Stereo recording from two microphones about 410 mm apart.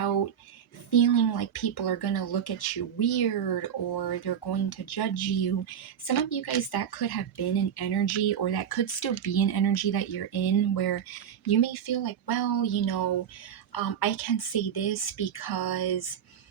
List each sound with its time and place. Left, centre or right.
0.9 s a woman's voice: left